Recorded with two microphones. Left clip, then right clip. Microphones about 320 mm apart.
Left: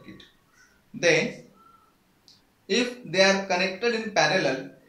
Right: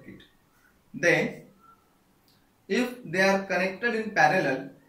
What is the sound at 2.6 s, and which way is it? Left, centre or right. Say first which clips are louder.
Speech: left 3 dB; centre.